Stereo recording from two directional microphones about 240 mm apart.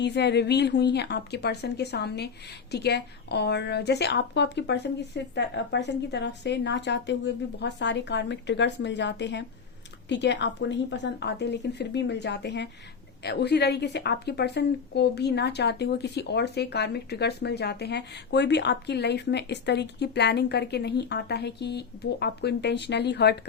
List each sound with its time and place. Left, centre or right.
0.0 s a woman's voice: left